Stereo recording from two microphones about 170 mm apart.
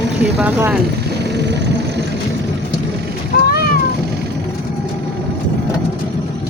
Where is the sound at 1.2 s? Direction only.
85° right.